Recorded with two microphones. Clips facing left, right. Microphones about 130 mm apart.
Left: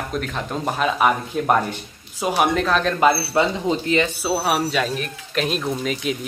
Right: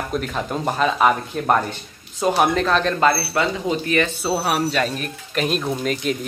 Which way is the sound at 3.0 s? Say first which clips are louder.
Left 1 dB; 15° left (ahead or behind).